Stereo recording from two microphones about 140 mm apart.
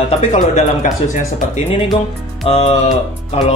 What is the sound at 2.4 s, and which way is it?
Music, 45° left (ahead or behind).